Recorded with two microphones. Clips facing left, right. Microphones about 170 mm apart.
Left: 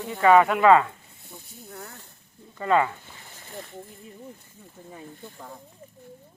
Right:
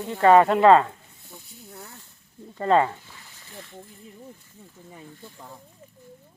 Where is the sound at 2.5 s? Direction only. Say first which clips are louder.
Right 2 dB; 30° right (ahead or behind).